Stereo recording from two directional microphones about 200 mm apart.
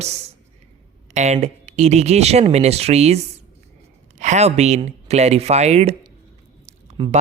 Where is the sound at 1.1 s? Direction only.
35° right (ahead or behind).